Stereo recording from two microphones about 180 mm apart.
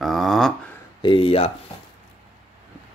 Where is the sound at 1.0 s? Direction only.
30° left (ahead or behind).